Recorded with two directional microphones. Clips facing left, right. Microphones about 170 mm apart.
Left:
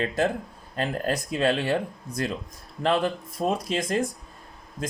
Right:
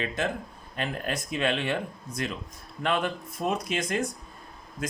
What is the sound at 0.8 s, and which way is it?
Speech, 35° left (ahead or behind).